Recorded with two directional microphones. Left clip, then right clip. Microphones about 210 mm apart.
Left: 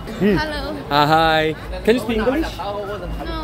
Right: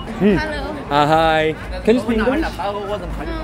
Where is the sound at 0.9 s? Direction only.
Centre (ahead or behind).